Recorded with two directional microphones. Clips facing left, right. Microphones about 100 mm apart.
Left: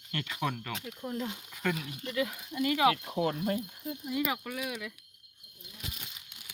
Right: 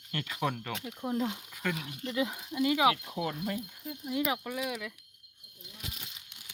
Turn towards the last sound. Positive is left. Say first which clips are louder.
# right 2 dB
turn(degrees=5)  # may be behind; listen again after turning